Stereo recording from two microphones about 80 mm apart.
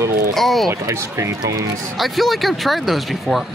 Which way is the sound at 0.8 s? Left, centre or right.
Right.